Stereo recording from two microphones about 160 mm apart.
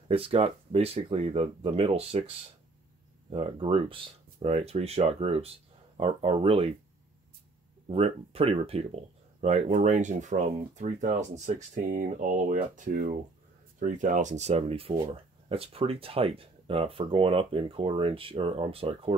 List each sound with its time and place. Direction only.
0.1 s speech: 35° right (ahead or behind)
7.9 s speech: 40° right (ahead or behind)